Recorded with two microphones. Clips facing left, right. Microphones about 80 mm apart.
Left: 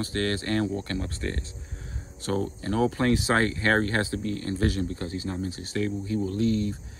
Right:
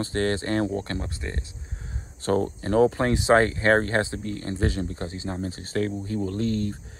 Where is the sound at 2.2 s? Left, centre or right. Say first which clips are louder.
Right 4 dB; right.